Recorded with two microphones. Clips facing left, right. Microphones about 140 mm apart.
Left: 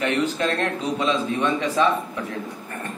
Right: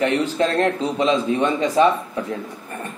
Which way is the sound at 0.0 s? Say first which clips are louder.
Right 3 dB; 30° right (ahead or behind).